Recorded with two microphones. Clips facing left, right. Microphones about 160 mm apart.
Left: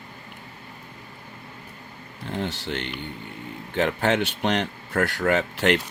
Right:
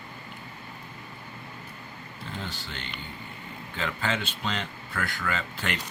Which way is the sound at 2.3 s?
75° left (ahead or behind).